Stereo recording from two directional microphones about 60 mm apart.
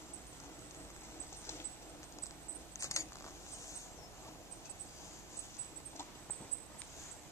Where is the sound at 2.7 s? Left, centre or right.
Left.